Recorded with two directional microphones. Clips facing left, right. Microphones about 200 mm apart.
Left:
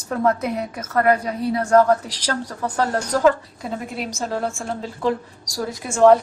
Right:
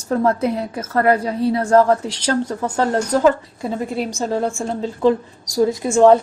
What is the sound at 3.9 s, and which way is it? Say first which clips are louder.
A woman's voice: right 4 dB; 30° right (ahead or behind).